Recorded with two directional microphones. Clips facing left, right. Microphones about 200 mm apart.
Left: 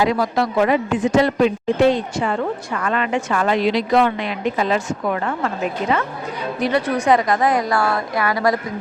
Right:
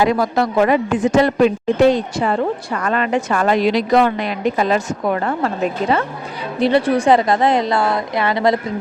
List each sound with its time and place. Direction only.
0.0 s a man's voice: 50° right (ahead or behind); by 8.5 s 25° right (ahead or behind)